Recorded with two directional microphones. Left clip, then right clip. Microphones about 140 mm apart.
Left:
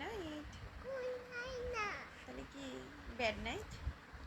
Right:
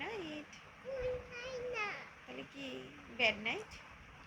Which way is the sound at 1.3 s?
25° left (ahead or behind).